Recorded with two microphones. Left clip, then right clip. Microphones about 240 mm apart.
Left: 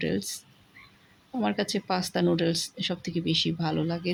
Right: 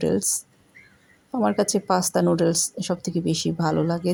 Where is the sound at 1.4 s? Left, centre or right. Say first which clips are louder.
Right 7 dB; centre.